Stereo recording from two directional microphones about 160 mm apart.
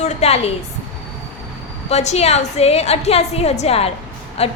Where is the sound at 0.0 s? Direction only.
40° left (ahead or behind).